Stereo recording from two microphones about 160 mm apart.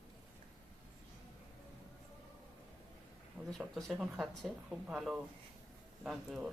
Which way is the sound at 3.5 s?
Centre (ahead or behind).